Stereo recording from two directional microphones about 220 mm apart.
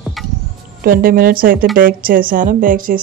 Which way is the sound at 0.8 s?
40° right (ahead or behind).